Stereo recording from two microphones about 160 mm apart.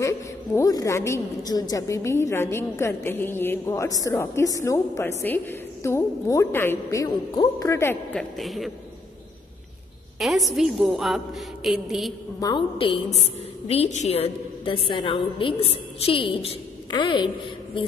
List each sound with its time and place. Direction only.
0.6 s a woman's voice: 20° left (ahead or behind); by 8.7 s centre (ahead or behind)
10.1 s a woman's voice: centre (ahead or behind)
12.4 s a woman's voice: 25° left (ahead or behind)
12.7 s a woman's voice: 35° left (ahead or behind)